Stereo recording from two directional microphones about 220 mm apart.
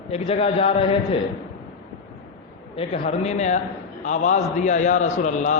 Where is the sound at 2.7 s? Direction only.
25° left (ahead or behind).